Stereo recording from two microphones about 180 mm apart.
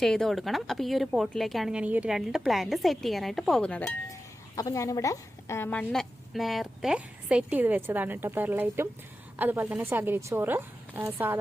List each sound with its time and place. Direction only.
0.0 s speech: centre (ahead or behind)
4.1 s a woman's voice: 20° left (ahead or behind); by 11.3 s 15° right (ahead or behind)